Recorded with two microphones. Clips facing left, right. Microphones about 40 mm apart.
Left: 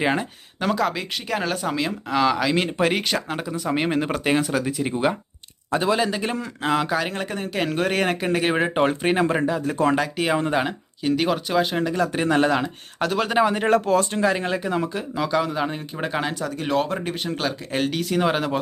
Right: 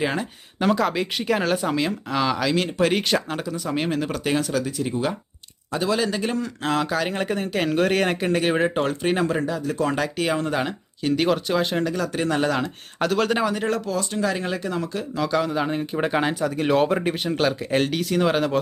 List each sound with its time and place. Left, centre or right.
0.0 s speech: centre
0.6 s speech: centre
2.6 s speech: centre
2.9 s speech: centre
7.1 s speech: centre
8.8 s speech: left
9.9 s speech: centre
11.9 s speech: left
13.4 s speech: left
14.3 s speech: centre